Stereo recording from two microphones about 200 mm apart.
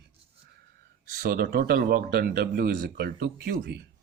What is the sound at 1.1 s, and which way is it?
Speech, 50° right (ahead or behind).